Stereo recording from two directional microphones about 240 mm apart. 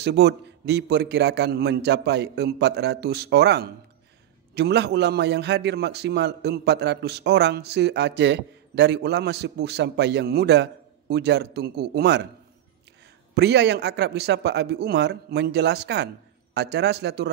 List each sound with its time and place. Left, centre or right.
0.0 s a man's voice: right
13.3 s a man's voice: right